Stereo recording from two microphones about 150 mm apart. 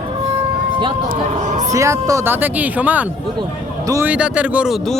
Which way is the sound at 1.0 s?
55° right (ahead or behind).